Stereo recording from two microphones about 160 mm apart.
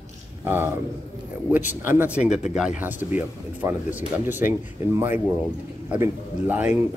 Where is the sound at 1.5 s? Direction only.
10° right (ahead or behind).